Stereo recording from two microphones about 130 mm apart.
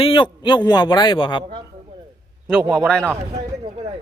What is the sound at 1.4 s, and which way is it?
Speech, 35° right (ahead or behind).